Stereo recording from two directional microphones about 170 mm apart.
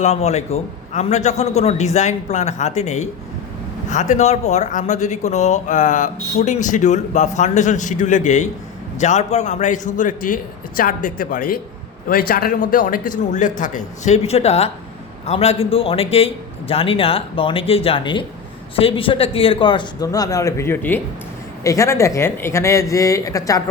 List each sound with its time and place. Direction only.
0.0 s a man's voice: 40° left (ahead or behind); by 23.6 s 20° left (ahead or behind)